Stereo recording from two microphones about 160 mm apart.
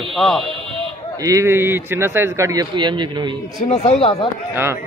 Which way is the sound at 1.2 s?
20° right (ahead or behind).